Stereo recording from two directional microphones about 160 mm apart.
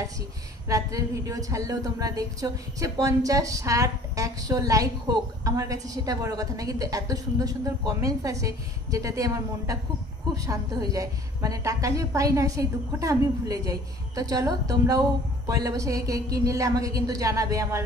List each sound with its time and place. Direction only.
0.7 s a woman's voice: 20° right (ahead or behind)